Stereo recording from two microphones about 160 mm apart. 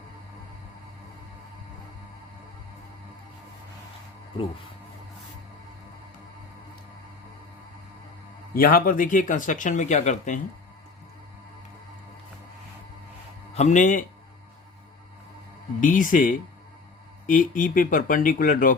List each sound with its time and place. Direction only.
8.5 s speech: 65° left (ahead or behind); by 10.4 s 50° left (ahead or behind)
13.5 s speech: 45° left (ahead or behind)
15.8 s speech: 55° left (ahead or behind)